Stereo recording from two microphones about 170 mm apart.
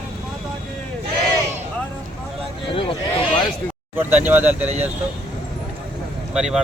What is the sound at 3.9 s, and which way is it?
Speech, 10° right (ahead or behind).